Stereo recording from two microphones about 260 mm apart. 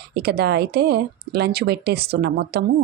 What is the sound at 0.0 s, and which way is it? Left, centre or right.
Speech, right.